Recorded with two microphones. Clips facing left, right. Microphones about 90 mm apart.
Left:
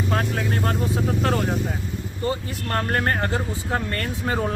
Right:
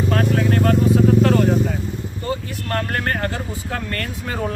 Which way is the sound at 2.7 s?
25° left (ahead or behind).